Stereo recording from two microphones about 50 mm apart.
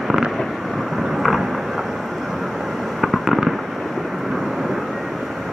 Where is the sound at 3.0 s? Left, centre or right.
Centre.